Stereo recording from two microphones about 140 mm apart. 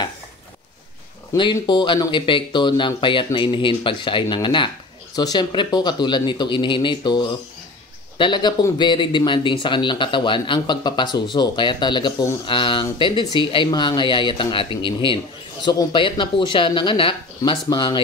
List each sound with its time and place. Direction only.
1.3 s speech: 30° left (ahead or behind)